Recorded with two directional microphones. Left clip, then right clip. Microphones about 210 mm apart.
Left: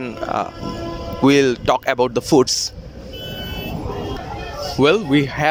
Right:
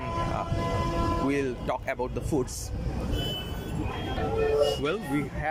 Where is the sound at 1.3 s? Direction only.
50° left (ahead or behind).